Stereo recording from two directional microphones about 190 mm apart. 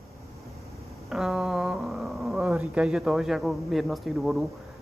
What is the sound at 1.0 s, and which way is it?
Speech, centre (ahead or behind).